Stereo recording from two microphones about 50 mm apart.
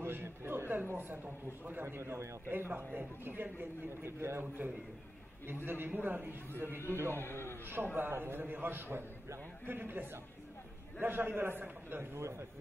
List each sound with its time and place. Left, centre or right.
0.0 s a sound: right
0.8 s a man's voice: right
2.0 s a man's voice: right
2.7 s a man's voice: right
4.0 s a man's voice: right
5.7 s a man's voice: right
6.9 s a man's voice: right
7.2 s a man's voice: left
7.6 s a man's voice: right
12.2 s a man's voice: right